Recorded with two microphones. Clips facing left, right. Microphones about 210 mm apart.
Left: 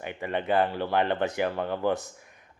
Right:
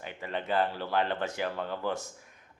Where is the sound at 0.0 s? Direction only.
55° left (ahead or behind).